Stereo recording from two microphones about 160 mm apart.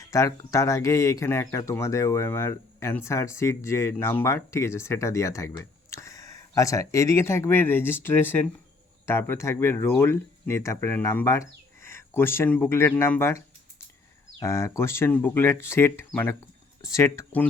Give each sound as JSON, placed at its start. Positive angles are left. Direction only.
{"t": 0.0, "sound": "speech", "side_deg": 20}